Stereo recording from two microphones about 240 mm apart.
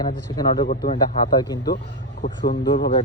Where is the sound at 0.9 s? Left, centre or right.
Centre.